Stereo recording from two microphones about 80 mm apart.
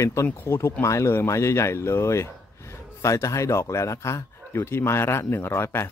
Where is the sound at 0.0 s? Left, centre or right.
Left.